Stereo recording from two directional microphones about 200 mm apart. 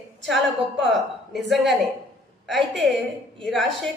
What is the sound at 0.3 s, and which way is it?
A woman's voice, centre (ahead or behind).